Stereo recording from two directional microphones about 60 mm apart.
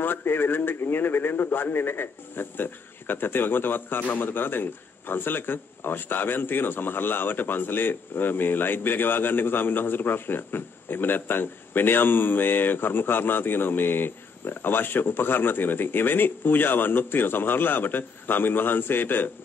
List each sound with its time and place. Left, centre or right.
0.0 s a man's voice: left